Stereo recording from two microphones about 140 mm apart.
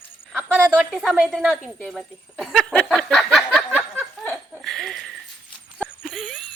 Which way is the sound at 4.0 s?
Centre (ahead or behind).